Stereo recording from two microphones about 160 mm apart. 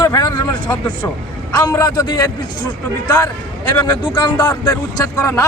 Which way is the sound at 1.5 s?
25° left (ahead or behind).